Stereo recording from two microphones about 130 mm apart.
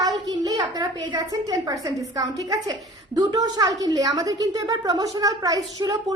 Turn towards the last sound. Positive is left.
turn(degrees=-30)  # may be behind; listen again after turning